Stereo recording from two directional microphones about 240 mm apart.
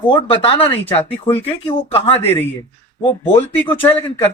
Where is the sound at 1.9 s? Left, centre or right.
Left.